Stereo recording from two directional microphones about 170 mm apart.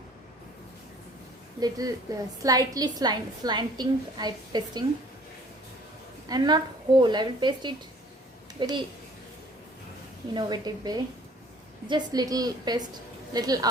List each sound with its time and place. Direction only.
1.5 s a woman's voice: 20° right (ahead or behind)
6.2 s a woman's voice: 25° right (ahead or behind)
10.3 s a woman's voice: 25° right (ahead or behind)